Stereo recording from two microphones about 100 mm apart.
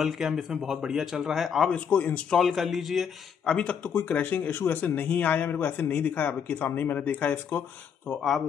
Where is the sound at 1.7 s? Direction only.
15° left (ahead or behind).